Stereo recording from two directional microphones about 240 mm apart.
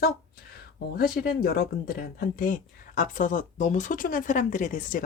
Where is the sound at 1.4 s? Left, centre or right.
Left.